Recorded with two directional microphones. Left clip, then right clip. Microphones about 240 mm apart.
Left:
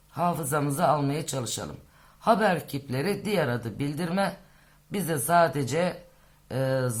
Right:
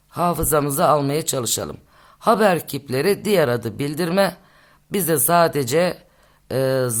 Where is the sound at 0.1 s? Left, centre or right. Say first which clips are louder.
Right 7 dB; right.